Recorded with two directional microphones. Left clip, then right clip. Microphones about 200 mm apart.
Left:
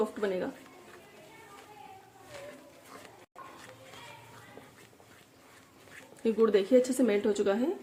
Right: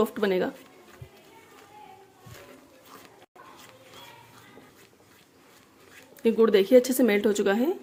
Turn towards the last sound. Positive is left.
turn(degrees=-35)  # may be behind; listen again after turning